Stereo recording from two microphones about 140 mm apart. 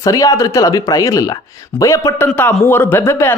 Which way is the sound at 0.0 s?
25° left (ahead or behind).